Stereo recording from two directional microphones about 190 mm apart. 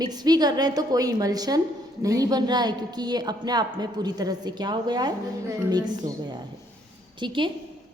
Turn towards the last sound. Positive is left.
turn(degrees=-25)  # may be behind; listen again after turning